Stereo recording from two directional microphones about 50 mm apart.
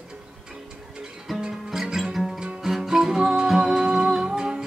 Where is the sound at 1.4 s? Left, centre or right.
Centre.